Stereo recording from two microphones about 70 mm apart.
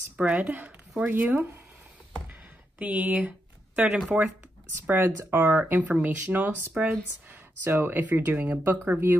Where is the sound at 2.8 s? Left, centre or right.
Right.